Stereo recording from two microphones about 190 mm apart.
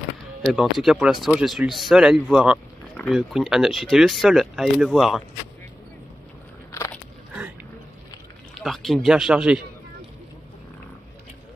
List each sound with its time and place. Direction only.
0.4 s speech: centre (ahead or behind)
6.7 s biting: 15° left (ahead or behind)
8.6 s speech: centre (ahead or behind)